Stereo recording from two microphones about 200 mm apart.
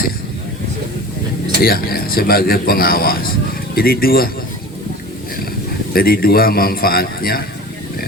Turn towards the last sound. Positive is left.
turn(degrees=50)  # may be behind; listen again after turning